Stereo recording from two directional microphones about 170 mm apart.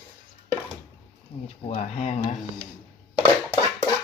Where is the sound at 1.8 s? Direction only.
40° left (ahead or behind).